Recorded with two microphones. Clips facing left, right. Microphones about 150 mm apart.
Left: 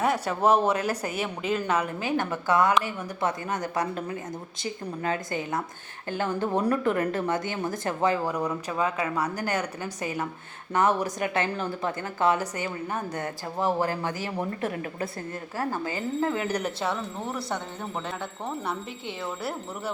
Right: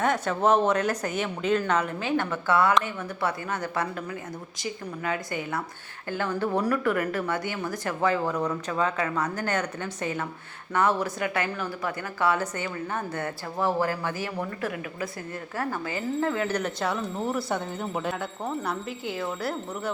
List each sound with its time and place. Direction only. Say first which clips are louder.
0.0 s speech: even; 10° left (ahead or behind)
4.6 s speech: left 1 dB; 30° left (ahead or behind)
5.4 s speech: left 1 dB; 20° left (ahead or behind)
16.2 s speech: even; 20° left (ahead or behind)
16.8 s speech: right 2 dB; 5° right (ahead or behind)